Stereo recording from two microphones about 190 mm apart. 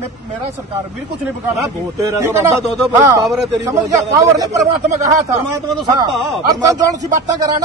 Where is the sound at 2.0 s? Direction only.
15° right (ahead or behind).